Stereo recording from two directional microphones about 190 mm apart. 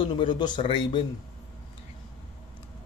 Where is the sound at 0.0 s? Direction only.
25° left (ahead or behind).